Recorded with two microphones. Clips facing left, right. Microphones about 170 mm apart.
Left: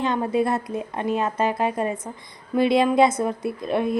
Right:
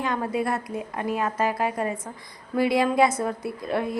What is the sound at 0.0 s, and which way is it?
A woman's voice, 25° left (ahead or behind).